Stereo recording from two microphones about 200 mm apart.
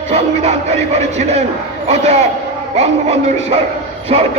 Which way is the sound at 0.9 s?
35° right (ahead or behind).